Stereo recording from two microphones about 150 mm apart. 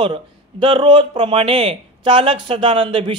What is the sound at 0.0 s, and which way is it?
Speech, 35° right (ahead or behind).